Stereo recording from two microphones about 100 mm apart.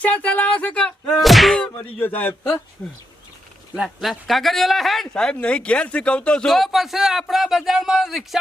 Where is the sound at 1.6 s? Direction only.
20° left (ahead or behind).